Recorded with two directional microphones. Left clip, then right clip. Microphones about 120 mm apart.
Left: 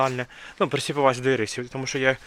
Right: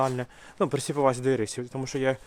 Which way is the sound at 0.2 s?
20° right (ahead or behind).